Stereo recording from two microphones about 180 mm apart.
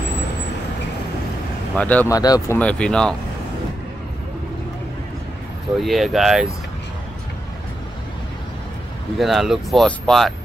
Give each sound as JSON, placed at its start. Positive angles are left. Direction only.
{"t": 1.8, "sound": "speech", "side_deg": 10}
{"t": 2.1, "sound": "speech", "side_deg": 20}
{"t": 5.8, "sound": "speech", "side_deg": 0}
{"t": 9.2, "sound": "speech", "side_deg": 0}